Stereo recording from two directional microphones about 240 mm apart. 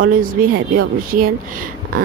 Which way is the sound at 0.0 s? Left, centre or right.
Right.